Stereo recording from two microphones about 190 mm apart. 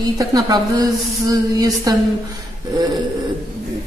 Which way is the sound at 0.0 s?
20° right (ahead or behind).